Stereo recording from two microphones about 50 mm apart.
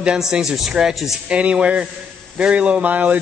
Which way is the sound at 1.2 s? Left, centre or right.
Right.